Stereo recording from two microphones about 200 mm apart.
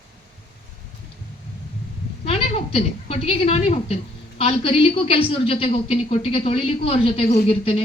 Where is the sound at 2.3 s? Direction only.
30° left (ahead or behind).